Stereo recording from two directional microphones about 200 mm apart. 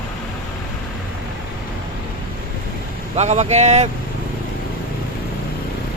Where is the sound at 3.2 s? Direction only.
35° right (ahead or behind).